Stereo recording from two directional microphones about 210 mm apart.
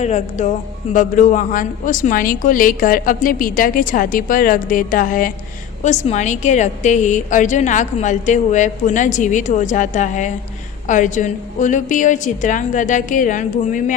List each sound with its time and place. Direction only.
0.0 s a woman's voice: 35° left (ahead or behind)